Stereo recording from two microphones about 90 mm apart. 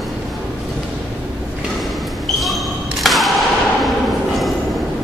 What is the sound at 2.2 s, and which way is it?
Basketball bounce, centre (ahead or behind).